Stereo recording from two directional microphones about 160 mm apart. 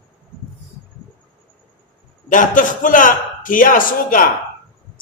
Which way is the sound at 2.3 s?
55° left (ahead or behind).